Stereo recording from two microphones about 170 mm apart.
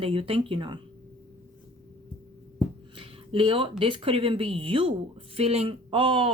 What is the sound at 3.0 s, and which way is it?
Speech, 30° right (ahead or behind).